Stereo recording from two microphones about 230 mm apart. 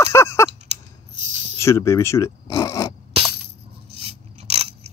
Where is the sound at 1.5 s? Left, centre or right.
Centre.